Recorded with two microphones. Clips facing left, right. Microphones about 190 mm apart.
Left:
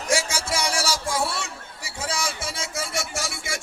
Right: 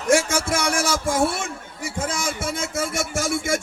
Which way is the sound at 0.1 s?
50° right (ahead or behind).